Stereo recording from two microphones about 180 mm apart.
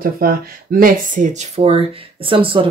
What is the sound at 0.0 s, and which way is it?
Speech, 55° right (ahead or behind).